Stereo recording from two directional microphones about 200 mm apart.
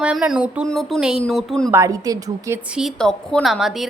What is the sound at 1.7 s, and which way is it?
Speech, 15° right (ahead or behind).